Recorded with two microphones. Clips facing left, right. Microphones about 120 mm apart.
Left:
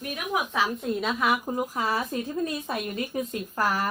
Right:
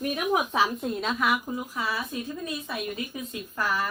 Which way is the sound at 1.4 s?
40° left (ahead or behind).